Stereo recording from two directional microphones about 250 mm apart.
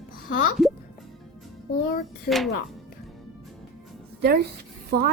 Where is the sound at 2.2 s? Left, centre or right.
Centre.